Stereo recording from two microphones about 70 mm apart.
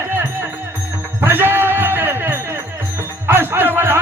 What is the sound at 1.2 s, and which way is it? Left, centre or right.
Jingle bell, right.